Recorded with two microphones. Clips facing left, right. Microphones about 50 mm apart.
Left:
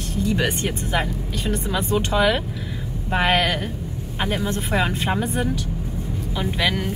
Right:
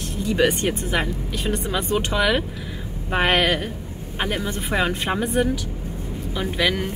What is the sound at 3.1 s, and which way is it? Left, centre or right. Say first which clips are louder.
A woman's voice: even; right.